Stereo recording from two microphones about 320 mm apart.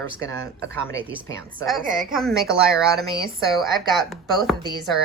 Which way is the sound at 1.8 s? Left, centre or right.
Right.